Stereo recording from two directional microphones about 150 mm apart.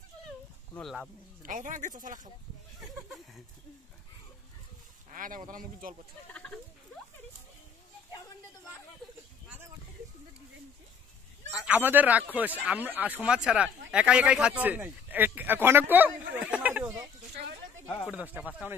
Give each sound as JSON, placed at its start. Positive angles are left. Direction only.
{"t": 0.7, "sound": "speech", "side_deg": 0}
{"t": 1.4, "sound": "speech", "side_deg": -60}
{"t": 5.1, "sound": "speech", "side_deg": -65}
{"t": 6.3, "sound": "speech", "side_deg": 10}
{"t": 11.5, "sound": "speech", "side_deg": -10}
{"t": 18.0, "sound": "speech", "side_deg": -10}